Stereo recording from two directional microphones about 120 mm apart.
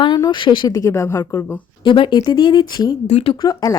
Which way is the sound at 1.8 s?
45° left (ahead or behind).